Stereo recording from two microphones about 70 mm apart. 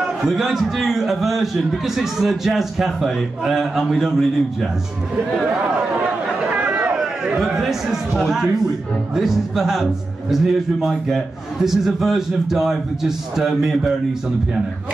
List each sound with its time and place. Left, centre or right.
0.0 s a man's voice: centre
6.5 s a sound: right
7.0 s a man's voice: centre